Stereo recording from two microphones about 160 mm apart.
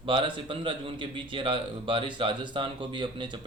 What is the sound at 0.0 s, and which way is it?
Speech, 30° right (ahead or behind).